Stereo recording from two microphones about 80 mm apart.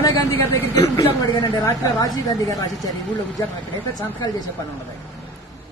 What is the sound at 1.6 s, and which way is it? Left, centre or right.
Speech, left.